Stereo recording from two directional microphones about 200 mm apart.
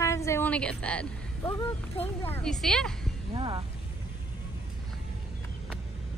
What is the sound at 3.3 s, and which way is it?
Speech, 25° right (ahead or behind).